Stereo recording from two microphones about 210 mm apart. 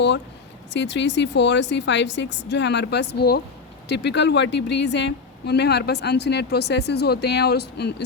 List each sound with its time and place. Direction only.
0.7 s a woman's voice: 60° left (ahead or behind)